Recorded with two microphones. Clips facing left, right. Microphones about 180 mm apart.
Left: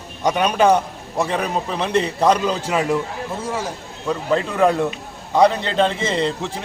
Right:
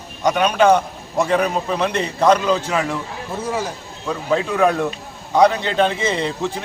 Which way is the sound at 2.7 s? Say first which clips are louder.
Left 2 dB; 10° left (ahead or behind).